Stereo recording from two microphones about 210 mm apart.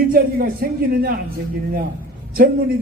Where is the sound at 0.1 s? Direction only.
45° right (ahead or behind).